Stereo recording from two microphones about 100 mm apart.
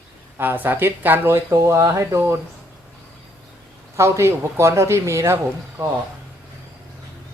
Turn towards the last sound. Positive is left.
turn(degrees=-25)  # may be behind; listen again after turning